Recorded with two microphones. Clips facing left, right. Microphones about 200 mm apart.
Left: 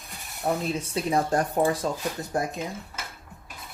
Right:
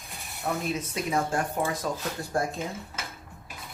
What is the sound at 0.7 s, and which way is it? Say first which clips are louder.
Speech: left 3 dB; 30° left (ahead or behind).